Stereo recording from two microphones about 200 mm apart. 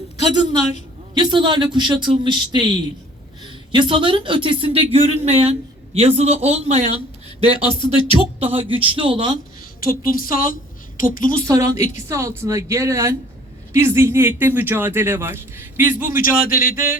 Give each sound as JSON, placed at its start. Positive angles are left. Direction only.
{"t": 1.1, "sound": "speech", "side_deg": -20}
{"t": 7.4, "sound": "speech", "side_deg": 25}
{"t": 8.4, "sound": "speech", "side_deg": -30}
{"t": 9.9, "sound": "a woman's voice", "side_deg": 45}
{"t": 11.4, "sound": "speech", "side_deg": -15}
{"t": 16.1, "sound": "a man's voice", "side_deg": 45}